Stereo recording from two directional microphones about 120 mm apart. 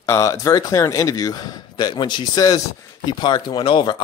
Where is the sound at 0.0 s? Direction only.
25° left (ahead or behind).